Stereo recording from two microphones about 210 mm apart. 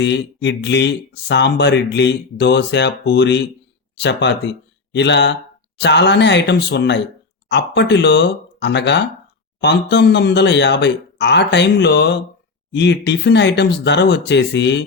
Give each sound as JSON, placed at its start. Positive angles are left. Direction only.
{"t": 0.0, "sound": "speech", "side_deg": 55}